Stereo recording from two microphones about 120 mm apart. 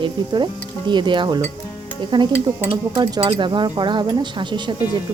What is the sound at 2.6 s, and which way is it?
Speech, 40° right (ahead or behind).